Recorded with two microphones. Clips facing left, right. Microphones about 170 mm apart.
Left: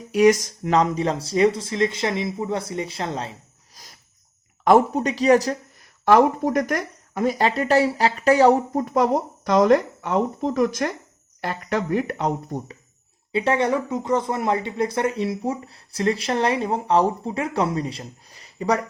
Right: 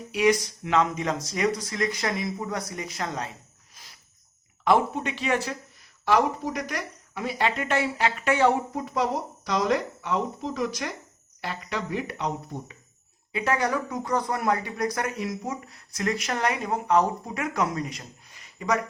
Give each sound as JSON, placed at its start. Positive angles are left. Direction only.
{"t": 0.1, "sound": "speech", "side_deg": 45}
{"t": 3.8, "sound": "a sound", "side_deg": 40}
{"t": 4.6, "sound": "speech", "side_deg": 40}
{"t": 6.1, "sound": "speech", "side_deg": 50}
{"t": 13.3, "sound": "speech", "side_deg": 30}